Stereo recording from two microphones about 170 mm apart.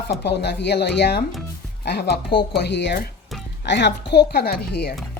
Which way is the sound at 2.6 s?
90° left.